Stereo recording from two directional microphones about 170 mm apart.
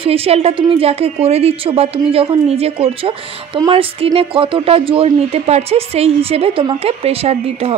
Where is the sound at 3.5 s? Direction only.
25° right (ahead or behind).